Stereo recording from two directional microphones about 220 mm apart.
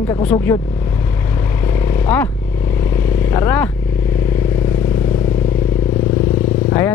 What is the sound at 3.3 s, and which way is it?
Speech, 10° left (ahead or behind).